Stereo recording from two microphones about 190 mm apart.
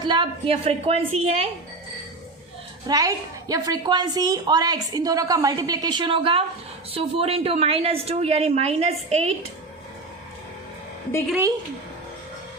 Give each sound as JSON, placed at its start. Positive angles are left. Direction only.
{"t": 0.0, "sound": "a woman's voice", "side_deg": -25}
{"t": 2.8, "sound": "a woman's voice", "side_deg": -20}